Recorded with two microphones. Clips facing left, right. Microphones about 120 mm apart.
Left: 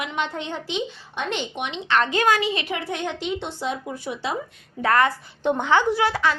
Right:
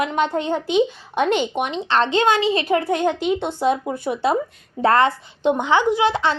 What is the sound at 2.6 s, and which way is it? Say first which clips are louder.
A woman's voice: right 9 dB; 40° right (ahead or behind).